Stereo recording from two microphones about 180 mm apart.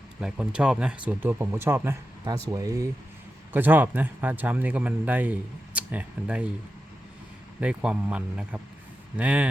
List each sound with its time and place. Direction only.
0.2 s a man's voice: 5° right (ahead or behind)
7.6 s a man's voice: 5° right (ahead or behind)